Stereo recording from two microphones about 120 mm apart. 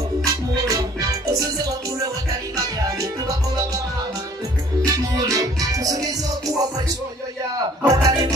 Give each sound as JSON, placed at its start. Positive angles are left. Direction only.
{"t": 0.2, "sound": "music", "side_deg": -30}
{"t": 2.5, "sound": "music", "side_deg": -30}
{"t": 4.8, "sound": "music", "side_deg": -30}
{"t": 7.9, "sound": "music", "side_deg": -30}